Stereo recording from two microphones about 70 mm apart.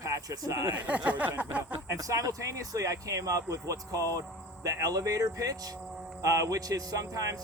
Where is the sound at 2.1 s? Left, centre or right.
Right.